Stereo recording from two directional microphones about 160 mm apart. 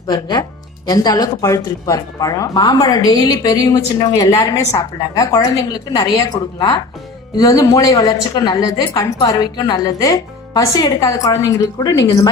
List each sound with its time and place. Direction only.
0.1 s speech: 25° left (ahead or behind)